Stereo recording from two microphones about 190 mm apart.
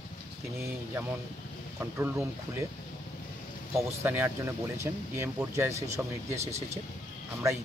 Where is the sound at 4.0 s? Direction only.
10° right (ahead or behind).